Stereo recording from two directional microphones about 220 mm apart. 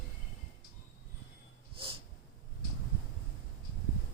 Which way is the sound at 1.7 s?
25° right (ahead or behind).